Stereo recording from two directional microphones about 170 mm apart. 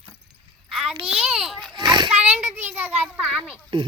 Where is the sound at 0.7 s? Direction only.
Centre (ahead or behind).